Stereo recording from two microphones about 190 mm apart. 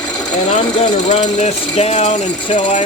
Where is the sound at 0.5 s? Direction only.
35° left (ahead or behind).